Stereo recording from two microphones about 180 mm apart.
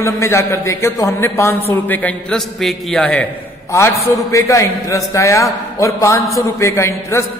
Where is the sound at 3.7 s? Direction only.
15° left (ahead or behind).